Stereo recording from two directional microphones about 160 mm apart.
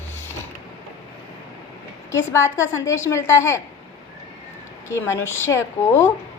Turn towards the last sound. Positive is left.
turn(degrees=15)  # may be behind; listen again after turning